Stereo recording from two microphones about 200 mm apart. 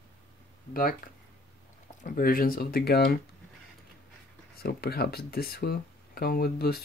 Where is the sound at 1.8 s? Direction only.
40° left (ahead or behind).